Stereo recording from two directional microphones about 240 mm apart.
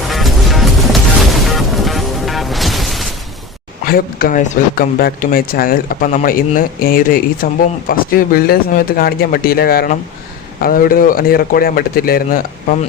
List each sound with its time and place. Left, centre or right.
0.1 s music: centre
3.8 s speech: left